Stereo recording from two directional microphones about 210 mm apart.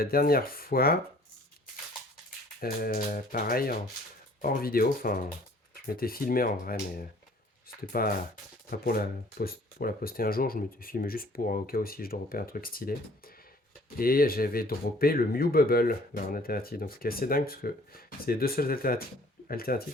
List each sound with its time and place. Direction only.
0.0 s speech: 45° left (ahead or behind)
2.6 s speech: 45° left (ahead or behind)
8.0 s speech: 45° left (ahead or behind)